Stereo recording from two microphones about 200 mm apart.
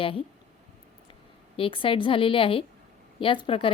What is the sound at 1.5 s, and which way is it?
A woman's voice, 25° left (ahead or behind).